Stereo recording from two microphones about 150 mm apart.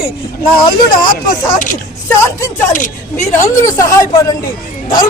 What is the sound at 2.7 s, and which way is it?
Speech, 60° left (ahead or behind).